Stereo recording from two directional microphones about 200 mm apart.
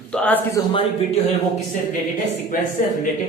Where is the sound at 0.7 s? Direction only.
25° left (ahead or behind).